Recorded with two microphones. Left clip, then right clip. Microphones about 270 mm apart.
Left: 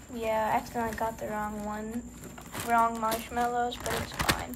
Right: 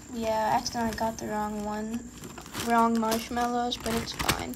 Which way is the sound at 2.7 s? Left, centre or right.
Centre.